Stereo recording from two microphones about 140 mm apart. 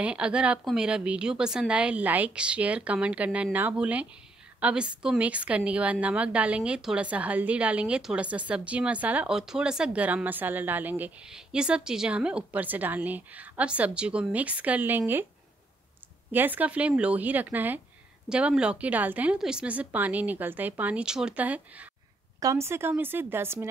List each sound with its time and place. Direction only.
0.0 s a woman's voice: 10° right (ahead or behind)
16.3 s a woman's voice: 15° right (ahead or behind)
22.4 s a woman's voice: 20° right (ahead or behind)